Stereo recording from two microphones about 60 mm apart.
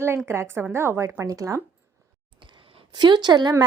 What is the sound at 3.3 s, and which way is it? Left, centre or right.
Speech, right.